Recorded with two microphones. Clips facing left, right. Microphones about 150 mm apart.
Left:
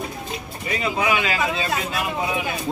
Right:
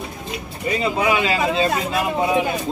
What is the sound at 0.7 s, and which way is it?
Speech, 30° right (ahead or behind).